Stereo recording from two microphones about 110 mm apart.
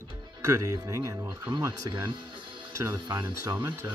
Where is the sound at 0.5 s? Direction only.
30° right (ahead or behind).